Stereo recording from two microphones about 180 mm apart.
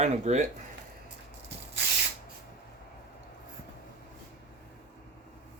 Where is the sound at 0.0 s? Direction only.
40° right (ahead or behind).